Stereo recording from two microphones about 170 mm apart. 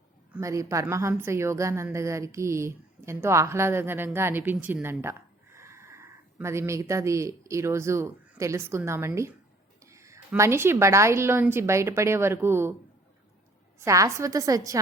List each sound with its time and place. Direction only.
0.3 s a woman's voice: 20° right (ahead or behind)
13.7 s a woman's voice: 15° right (ahead or behind)